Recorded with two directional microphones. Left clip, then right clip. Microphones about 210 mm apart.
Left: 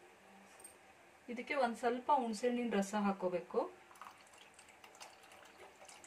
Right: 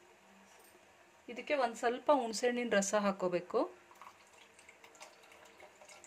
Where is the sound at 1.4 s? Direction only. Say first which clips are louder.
Right 3 dB; 50° right (ahead or behind).